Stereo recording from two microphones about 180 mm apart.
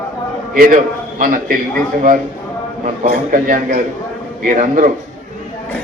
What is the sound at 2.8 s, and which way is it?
A man's voice, 50° right (ahead or behind).